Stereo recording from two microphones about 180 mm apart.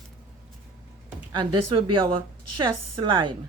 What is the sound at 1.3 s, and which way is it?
A woman's voice, 25° right (ahead or behind).